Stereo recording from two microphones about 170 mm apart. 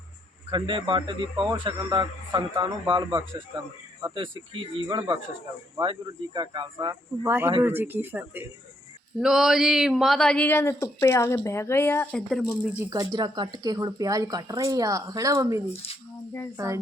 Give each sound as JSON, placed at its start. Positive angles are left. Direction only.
{"t": 0.5, "sound": "speech", "side_deg": -30}
{"t": 1.4, "sound": "speech", "side_deg": 0}
{"t": 1.6, "sound": "speech", "side_deg": -30}
{"t": 6.7, "sound": "speech", "side_deg": -15}
{"t": 12.8, "sound": "speech", "side_deg": -20}